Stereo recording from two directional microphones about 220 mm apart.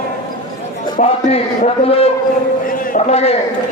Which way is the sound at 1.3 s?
30° left (ahead or behind).